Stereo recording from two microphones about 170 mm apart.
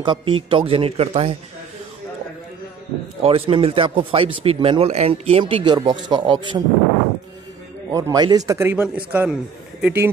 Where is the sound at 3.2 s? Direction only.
35° right (ahead or behind).